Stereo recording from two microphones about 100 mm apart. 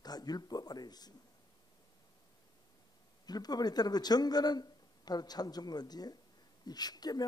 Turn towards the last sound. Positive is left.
turn(degrees=40)  # may be behind; listen again after turning